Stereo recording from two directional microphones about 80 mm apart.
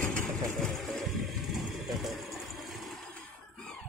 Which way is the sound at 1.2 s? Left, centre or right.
Centre.